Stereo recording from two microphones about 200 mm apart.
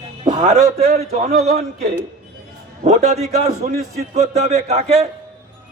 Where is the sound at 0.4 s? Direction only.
35° right (ahead or behind).